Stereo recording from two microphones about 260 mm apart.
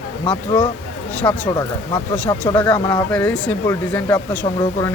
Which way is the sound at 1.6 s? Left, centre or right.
Centre.